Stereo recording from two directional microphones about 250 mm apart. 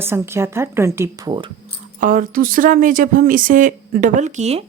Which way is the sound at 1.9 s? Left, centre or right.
Right.